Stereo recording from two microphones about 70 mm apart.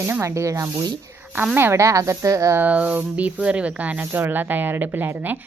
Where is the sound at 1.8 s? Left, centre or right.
Right.